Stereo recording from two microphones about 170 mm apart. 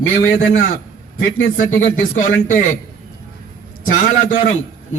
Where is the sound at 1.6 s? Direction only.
50° left (ahead or behind).